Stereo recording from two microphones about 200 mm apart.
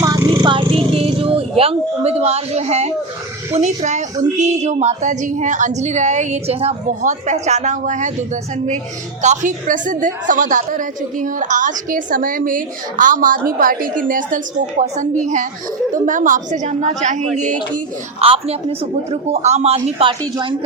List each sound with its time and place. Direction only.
0.0 s a sound: 20° right (ahead or behind)
3.5 s a woman's voice: 30° right (ahead or behind)
9.2 s a woman's voice: 35° right (ahead or behind)